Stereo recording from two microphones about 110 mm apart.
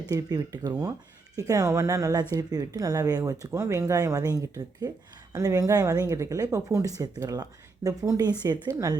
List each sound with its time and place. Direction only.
0.1 s speech: 35° right (ahead or behind)